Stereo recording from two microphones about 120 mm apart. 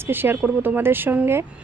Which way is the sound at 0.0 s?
15° right (ahead or behind).